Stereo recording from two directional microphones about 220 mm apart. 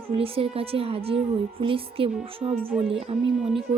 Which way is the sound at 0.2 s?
25° right (ahead or behind).